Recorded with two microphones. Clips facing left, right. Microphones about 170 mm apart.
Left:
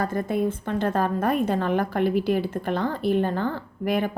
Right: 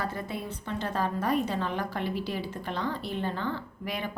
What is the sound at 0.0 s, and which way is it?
A woman's voice, 45° left (ahead or behind).